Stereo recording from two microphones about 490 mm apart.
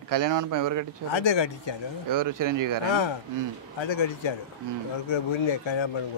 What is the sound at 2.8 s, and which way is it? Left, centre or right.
Speech, left.